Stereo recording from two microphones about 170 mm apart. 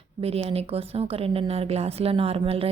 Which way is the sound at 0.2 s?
35° right (ahead or behind).